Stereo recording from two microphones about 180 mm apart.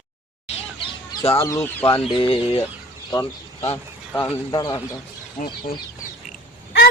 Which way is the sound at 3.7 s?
10° left (ahead or behind).